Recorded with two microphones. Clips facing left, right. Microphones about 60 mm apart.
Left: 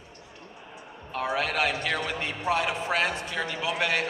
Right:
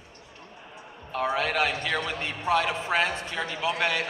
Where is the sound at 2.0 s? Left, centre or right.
Centre.